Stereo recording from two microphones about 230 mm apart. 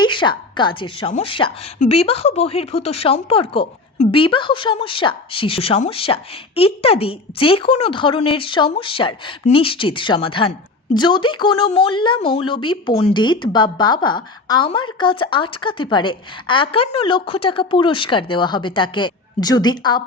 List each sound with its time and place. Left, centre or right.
0.0 s a woman's voice: left